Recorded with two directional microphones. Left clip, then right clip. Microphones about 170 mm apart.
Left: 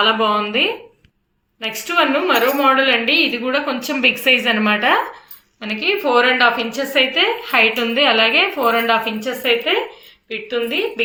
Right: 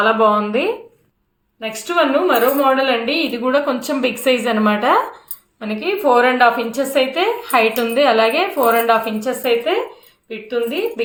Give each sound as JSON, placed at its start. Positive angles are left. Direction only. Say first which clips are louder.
{"t": 0.0, "sound": "a woman's voice", "louder": "right 2 dB", "side_deg": -35}